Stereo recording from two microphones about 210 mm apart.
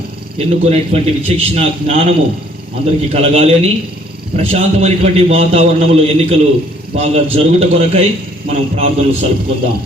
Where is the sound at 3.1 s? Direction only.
30° right (ahead or behind).